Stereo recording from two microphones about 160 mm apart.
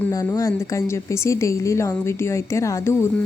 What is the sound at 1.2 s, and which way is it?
Speech, 20° left (ahead or behind).